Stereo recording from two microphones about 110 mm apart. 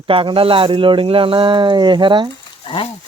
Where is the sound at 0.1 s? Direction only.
55° right (ahead or behind).